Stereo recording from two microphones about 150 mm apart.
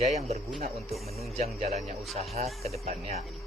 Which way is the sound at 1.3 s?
50° right (ahead or behind).